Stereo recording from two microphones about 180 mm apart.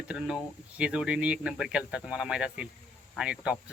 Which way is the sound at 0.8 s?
5° right (ahead or behind).